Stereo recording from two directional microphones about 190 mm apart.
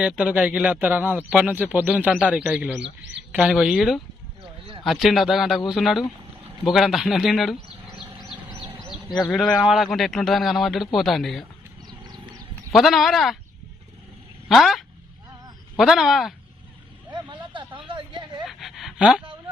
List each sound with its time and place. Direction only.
0.0 s a man's voice: 5° right (ahead or behind)
2.8 s speech: 70° right (ahead or behind)
3.3 s a man's voice: 5° right (ahead or behind)
8.4 s a sound: 25° right (ahead or behind)
8.9 s a man's voice: centre (ahead or behind)
11.9 s a sound: 20° right (ahead or behind)
12.7 s a man's voice: centre (ahead or behind)
14.5 s a man's voice: centre (ahead or behind)
17.1 s hubbub: 25° right (ahead or behind)
18.4 s a sound: centre (ahead or behind)